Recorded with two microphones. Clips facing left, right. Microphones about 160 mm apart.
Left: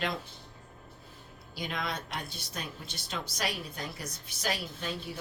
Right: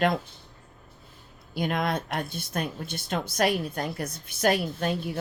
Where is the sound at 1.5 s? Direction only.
55° right (ahead or behind).